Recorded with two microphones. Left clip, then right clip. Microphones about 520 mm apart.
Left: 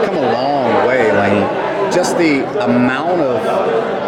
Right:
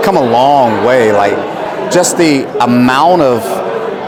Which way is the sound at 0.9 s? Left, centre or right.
Right.